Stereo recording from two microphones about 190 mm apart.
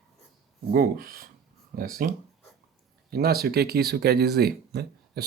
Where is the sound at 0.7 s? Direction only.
50° right (ahead or behind).